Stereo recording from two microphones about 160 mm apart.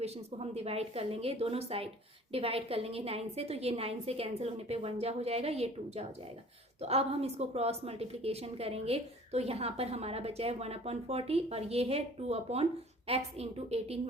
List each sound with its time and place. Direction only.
0.0 s a woman's voice: 40° right (ahead or behind)